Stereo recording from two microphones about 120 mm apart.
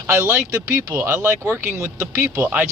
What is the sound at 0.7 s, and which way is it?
Speech, 30° right (ahead or behind).